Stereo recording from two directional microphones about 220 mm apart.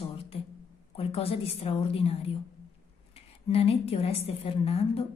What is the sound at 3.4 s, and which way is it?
Speech, 25° left (ahead or behind).